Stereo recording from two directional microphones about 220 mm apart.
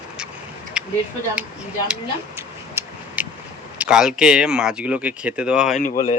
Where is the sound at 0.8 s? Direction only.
5° right (ahead or behind).